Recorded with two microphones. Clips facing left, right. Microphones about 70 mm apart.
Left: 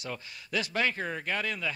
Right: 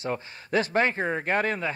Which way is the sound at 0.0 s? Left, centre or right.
Right.